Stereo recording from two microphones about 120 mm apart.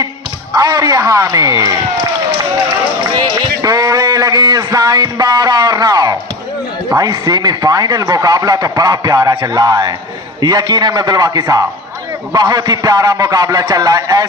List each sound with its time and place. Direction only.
0.5 s speech: 30° right (ahead or behind)
3.2 s a sound: 30° right (ahead or behind)
6.9 s speech: 30° right (ahead or behind)